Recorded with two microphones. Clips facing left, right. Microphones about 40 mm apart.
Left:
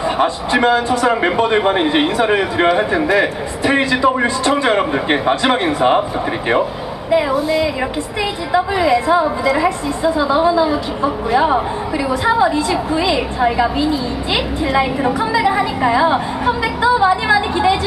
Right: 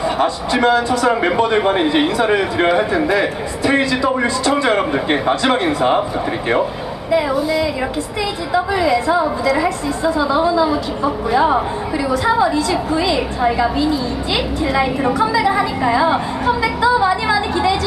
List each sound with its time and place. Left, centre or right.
0.2 s a woman's voice: centre
7.2 s a woman's voice: centre